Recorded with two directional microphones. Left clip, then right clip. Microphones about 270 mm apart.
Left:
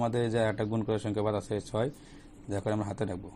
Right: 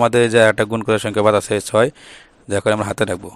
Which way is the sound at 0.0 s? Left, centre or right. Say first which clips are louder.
Right 17 dB; right.